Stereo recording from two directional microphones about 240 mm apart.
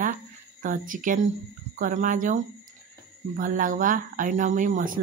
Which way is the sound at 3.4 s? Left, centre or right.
Right.